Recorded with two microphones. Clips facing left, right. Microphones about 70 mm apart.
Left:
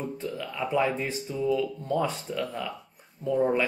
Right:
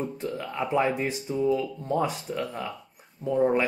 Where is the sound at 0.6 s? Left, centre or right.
Right.